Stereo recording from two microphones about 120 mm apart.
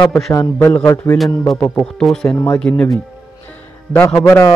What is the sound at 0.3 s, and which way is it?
Speech, 25° left (ahead or behind).